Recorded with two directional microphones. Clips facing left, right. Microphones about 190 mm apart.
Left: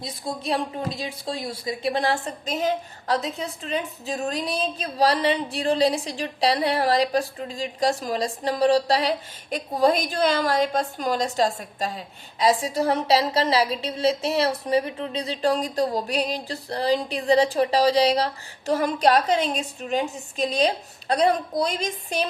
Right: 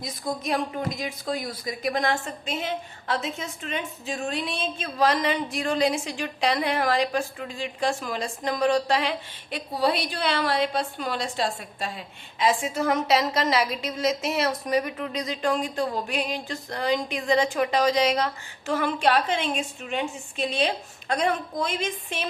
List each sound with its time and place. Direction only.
0.0 s a woman's voice: 30° left (ahead or behind)